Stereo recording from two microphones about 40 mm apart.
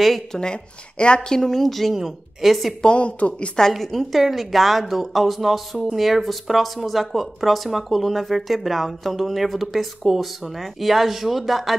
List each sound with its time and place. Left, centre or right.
0.3 s speech: centre
1.4 s speech: centre
2.8 s a woman's voice: left
3.7 s speech: centre